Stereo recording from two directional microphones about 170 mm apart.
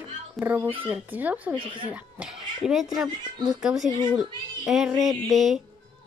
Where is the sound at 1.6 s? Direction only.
30° right (ahead or behind).